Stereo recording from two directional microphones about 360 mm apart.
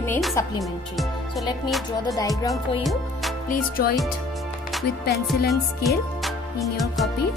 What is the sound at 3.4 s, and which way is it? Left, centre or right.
Music, left.